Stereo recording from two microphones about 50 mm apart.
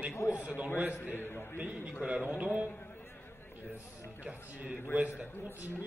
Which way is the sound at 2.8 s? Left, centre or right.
Left.